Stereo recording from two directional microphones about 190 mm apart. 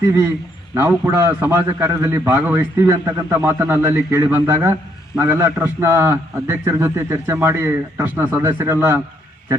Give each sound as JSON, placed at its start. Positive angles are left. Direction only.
{"t": 0.1, "sound": "a man's voice", "side_deg": -15}